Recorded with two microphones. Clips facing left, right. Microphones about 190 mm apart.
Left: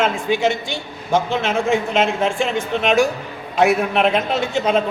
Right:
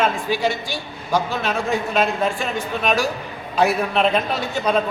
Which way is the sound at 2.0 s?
90° left.